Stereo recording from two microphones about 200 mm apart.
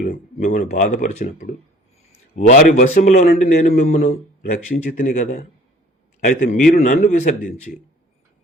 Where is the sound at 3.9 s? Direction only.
35° left (ahead or behind).